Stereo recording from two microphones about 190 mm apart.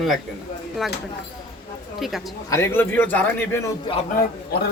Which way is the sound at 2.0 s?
Centre (ahead or behind).